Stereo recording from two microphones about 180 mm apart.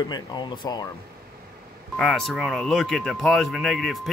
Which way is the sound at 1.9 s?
Centre (ahead or behind).